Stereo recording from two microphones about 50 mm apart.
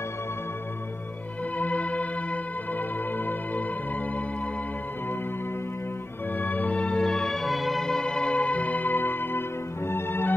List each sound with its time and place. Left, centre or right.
1.6 s music: left
6.3 s music: left